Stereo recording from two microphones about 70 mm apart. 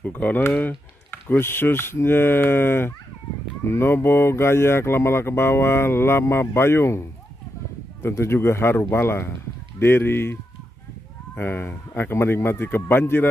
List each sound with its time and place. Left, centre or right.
0.0 s speech: left